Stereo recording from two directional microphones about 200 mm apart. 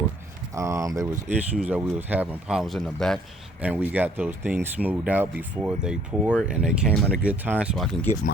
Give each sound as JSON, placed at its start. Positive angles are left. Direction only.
{"t": 0.5, "sound": "speech", "side_deg": -15}